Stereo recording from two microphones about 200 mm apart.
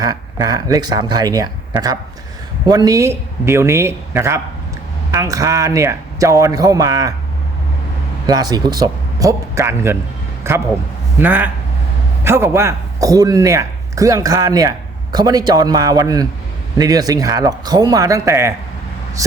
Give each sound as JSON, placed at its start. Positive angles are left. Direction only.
{"t": 0.0, "sound": "speech", "side_deg": -20}
{"t": 2.6, "sound": "a man's voice", "side_deg": -20}
{"t": 8.3, "sound": "a man's voice", "side_deg": -20}